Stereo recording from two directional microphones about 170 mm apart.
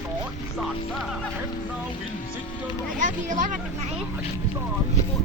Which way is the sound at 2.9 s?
50° right (ahead or behind).